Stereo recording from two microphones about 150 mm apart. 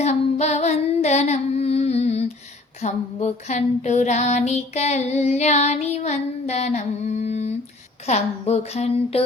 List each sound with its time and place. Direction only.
0.0 s singing: 50° left (ahead or behind)
2.8 s female singing: 50° left (ahead or behind)